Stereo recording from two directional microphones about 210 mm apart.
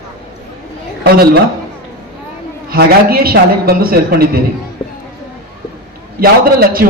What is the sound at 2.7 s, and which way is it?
A man's voice, 45° right (ahead or behind).